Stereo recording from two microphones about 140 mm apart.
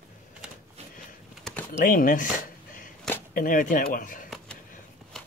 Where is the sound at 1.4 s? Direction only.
5° left (ahead or behind).